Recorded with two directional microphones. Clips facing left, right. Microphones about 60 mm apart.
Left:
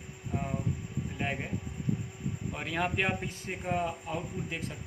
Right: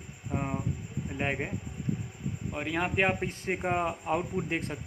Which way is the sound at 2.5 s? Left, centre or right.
Centre.